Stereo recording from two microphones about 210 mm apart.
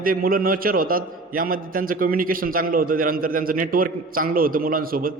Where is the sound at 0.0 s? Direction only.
45° right (ahead or behind).